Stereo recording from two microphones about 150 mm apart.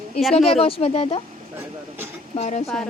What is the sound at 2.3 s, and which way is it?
Speech, 45° left (ahead or behind).